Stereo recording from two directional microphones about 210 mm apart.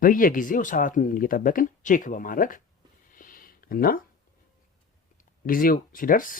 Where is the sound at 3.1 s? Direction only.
40° left (ahead or behind).